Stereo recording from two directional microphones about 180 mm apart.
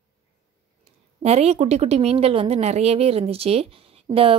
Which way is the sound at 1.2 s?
35° right (ahead or behind).